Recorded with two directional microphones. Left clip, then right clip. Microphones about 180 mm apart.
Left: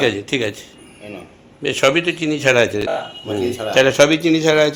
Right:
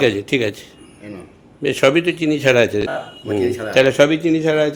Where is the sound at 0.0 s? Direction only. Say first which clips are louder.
Right 1 dB; 35° right (ahead or behind).